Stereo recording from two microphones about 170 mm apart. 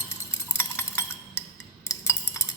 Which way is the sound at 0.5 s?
15° left (ahead or behind).